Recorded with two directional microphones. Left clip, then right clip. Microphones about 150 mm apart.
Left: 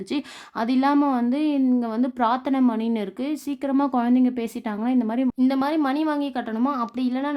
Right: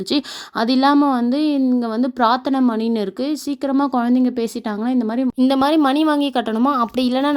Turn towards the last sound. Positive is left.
turn(degrees=-40)  # may be behind; listen again after turning